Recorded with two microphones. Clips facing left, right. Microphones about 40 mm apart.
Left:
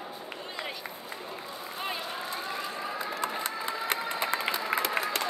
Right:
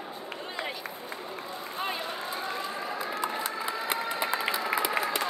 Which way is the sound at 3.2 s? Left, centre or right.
Left.